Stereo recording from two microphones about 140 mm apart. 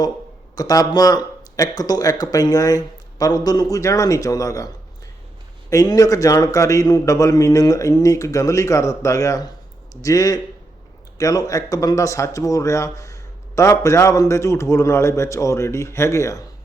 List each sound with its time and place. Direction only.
0.5 s speech: 25° left (ahead or behind)
5.7 s speech: 25° left (ahead or behind)